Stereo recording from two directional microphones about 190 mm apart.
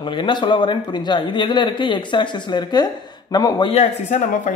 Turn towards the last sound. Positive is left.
turn(degrees=40)  # may be behind; listen again after turning